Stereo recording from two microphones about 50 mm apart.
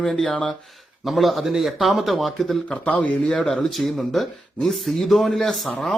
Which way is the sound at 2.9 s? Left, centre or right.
Left.